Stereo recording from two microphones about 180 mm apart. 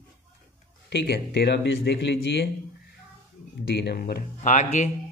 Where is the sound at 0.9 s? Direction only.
65° left (ahead or behind).